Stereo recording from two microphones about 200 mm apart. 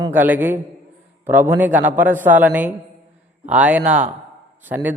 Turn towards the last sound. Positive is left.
turn(degrees=-10)  # may be behind; listen again after turning